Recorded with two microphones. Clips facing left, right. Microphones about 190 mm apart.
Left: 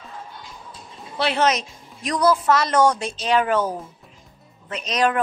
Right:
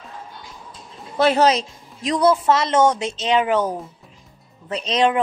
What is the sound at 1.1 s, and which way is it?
Speech, 45° right (ahead or behind).